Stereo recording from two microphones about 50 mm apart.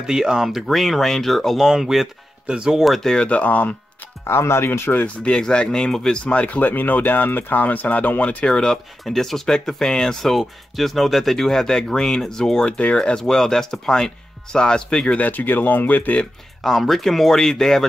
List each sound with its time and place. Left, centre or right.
0.0 s speech: centre
2.4 s speech: right
2.7 s speech: centre
3.3 s speech: left
4.2 s speech: left
4.9 s speech: left
5.4 s speech: centre
6.2 s speech: left
8.5 s speech: centre
9.0 s speech: centre
10.2 s speech: centre
15.1 s speech: left
16.6 s speech: centre